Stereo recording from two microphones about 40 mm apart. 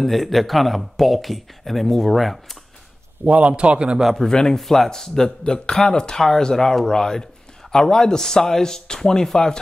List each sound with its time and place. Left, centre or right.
0.0 s speech: centre
3.3 s a man's voice: right
4.2 s speech: centre